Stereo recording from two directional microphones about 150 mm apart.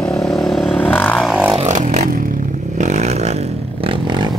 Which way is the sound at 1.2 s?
Centre (ahead or behind).